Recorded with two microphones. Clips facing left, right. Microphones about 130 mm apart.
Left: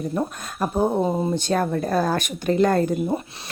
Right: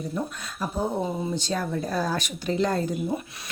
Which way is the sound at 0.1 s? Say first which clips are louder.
Left 5 dB; 55° left (ahead or behind).